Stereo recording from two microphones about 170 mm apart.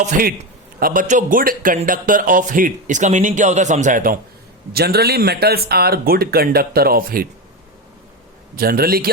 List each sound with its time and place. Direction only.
0.0 s speech: 55° right (ahead or behind)
4.7 s speech: 65° right (ahead or behind)
8.5 s speech: 60° right (ahead or behind)